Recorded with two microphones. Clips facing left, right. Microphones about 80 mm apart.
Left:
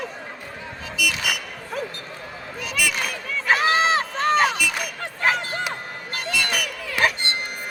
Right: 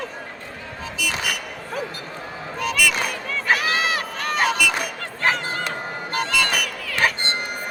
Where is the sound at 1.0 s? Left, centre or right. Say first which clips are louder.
Left 3 dB; right.